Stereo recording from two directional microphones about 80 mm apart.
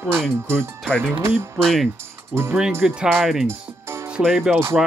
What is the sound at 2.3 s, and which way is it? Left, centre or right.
Speech, centre.